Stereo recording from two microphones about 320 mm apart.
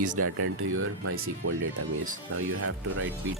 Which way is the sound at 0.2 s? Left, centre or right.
Right.